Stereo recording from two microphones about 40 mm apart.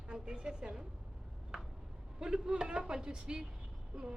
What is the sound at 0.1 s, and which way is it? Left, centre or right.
Speech, right.